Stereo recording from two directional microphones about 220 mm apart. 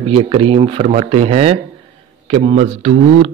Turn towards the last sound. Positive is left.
turn(degrees=-30)  # may be behind; listen again after turning